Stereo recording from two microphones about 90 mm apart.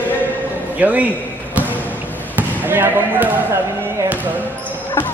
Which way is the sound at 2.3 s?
20° right (ahead or behind).